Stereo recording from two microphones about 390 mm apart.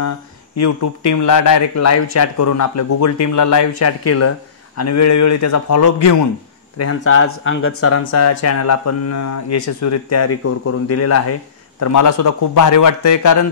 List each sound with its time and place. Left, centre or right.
0.6 s speech: left
6.8 s speech: left